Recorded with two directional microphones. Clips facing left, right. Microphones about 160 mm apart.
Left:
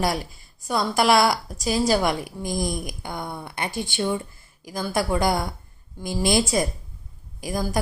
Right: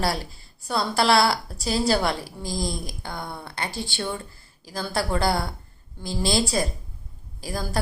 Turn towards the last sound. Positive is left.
turn(degrees=15)  # may be behind; listen again after turning